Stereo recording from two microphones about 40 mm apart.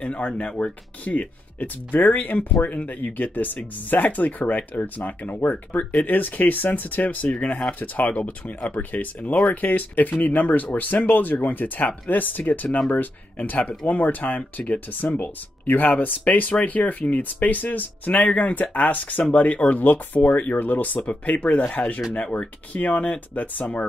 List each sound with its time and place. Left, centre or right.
0.0 s speech: left
1.0 s speech: left
3.0 s speech: left
19.8 s speech: left